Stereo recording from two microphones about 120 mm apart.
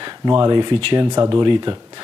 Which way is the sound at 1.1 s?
30° right (ahead or behind).